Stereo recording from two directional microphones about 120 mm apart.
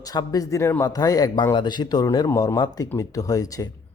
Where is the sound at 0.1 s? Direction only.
30° left (ahead or behind).